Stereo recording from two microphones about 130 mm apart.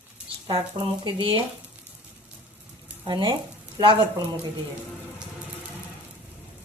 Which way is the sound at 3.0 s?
35° right (ahead or behind).